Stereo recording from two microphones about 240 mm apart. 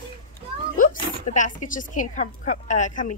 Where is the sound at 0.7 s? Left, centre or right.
Left.